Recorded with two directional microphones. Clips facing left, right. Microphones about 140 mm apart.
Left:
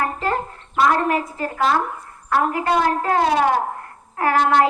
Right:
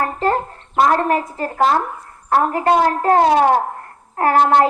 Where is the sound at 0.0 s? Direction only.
40° right (ahead or behind).